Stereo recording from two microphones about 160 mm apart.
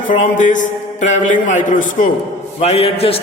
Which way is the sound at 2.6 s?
40° left (ahead or behind).